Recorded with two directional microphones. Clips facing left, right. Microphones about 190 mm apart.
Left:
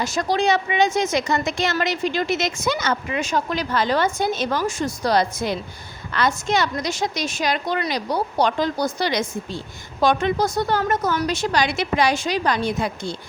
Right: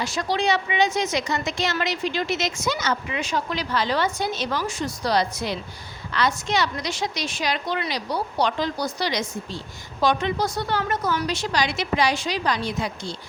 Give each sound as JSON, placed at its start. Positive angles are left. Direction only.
{"t": 0.0, "sound": "a woman's voice", "side_deg": 45}